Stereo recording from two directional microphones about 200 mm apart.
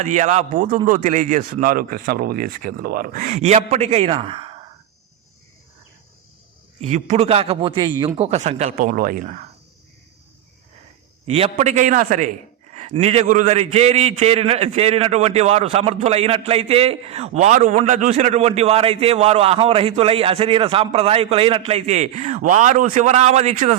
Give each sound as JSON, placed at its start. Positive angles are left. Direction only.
{"t": 0.0, "sound": "a man's voice", "side_deg": -35}
{"t": 6.7, "sound": "a man's voice", "side_deg": -35}
{"t": 11.3, "sound": "a man's voice", "side_deg": -30}